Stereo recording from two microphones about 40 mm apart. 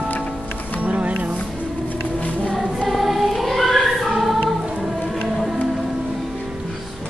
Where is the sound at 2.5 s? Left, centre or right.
Centre.